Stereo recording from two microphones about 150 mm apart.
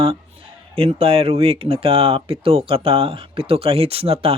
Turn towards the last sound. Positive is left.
turn(degrees=-40)  # may be behind; listen again after turning